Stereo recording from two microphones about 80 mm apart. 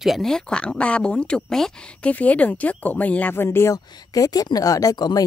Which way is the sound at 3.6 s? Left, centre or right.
Left.